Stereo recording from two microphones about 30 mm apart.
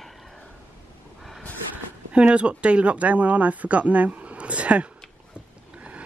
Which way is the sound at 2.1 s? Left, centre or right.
Right.